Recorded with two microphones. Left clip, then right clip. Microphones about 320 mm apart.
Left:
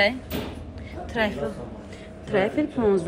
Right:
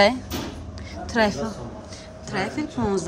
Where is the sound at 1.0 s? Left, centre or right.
Right.